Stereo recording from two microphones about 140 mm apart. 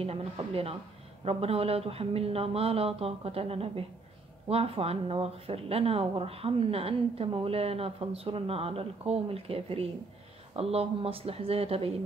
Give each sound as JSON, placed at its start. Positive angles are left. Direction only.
{"t": 0.0, "sound": "speech", "side_deg": -45}